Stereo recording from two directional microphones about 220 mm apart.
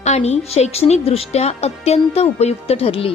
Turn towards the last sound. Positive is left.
turn(degrees=25)  # may be behind; listen again after turning